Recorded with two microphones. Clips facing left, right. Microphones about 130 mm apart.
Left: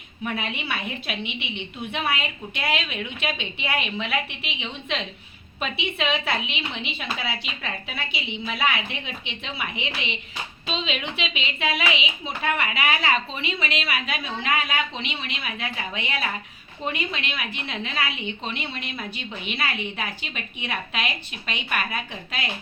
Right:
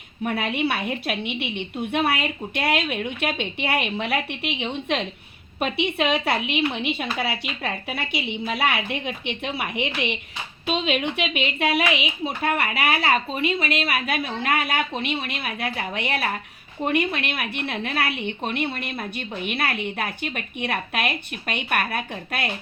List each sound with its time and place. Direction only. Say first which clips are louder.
0.5 s a woman's voice: right 6 dB; 60° right (ahead or behind)
3.9 s a woman's voice: right 2 dB; 40° right (ahead or behind)
4.3 s a woman's voice: right 7 dB; 55° right (ahead or behind)